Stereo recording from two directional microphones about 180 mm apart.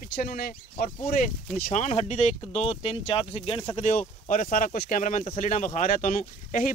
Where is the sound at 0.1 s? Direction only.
55° left (ahead or behind).